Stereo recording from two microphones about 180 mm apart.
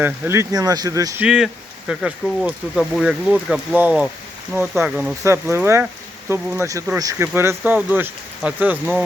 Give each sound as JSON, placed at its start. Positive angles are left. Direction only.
{"t": 0.0, "sound": "speech", "side_deg": -15}
{"t": 1.2, "sound": "speech", "side_deg": -5}
{"t": 5.2, "sound": "speech", "side_deg": -15}